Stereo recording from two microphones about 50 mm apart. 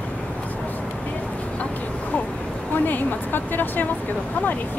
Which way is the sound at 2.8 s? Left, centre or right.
Left.